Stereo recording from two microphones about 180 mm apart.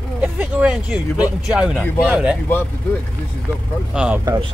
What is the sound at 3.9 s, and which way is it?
Speech, 5° right (ahead or behind).